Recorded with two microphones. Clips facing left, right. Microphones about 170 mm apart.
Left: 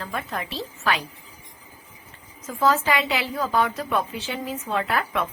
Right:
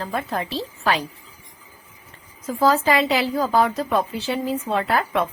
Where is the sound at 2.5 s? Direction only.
35° right (ahead or behind).